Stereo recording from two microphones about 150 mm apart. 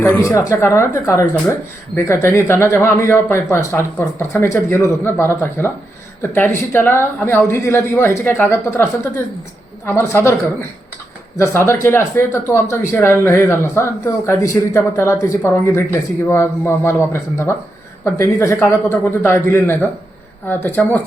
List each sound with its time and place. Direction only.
0.3 s speech: 20° left (ahead or behind)